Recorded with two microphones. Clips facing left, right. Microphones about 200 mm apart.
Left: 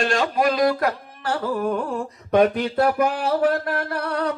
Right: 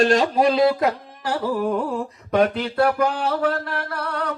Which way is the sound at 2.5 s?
15° left (ahead or behind).